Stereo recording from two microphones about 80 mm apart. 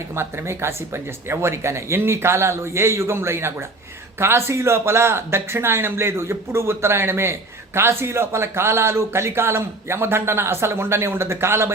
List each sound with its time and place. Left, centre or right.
0.2 s speech: right